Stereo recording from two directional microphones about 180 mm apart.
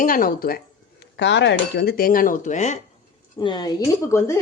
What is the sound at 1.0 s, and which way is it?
Dishes, 75° left (ahead or behind).